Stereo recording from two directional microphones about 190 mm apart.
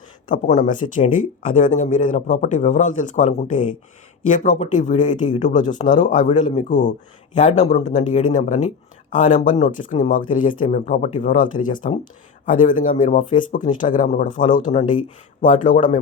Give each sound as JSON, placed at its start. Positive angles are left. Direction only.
{"t": 0.3, "sound": "speech", "side_deg": 40}